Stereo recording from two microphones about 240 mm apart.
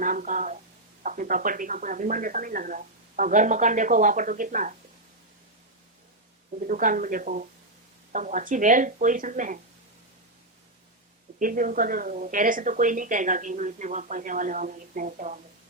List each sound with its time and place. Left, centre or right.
0.0 s speech: right
6.7 s speech: right
11.3 s speech: right